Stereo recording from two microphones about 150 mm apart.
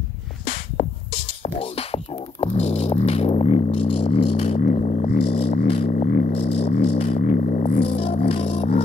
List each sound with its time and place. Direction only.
1.6 s music: 40° left (ahead or behind)
5.9 s music: 75° left (ahead or behind)
6.3 s music: 45° left (ahead or behind)